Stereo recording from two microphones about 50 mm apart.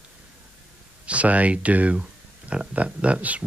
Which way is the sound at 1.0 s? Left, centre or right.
Right.